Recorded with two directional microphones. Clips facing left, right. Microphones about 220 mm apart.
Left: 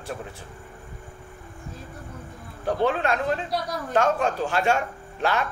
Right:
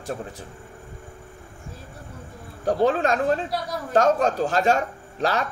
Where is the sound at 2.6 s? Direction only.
40° right (ahead or behind).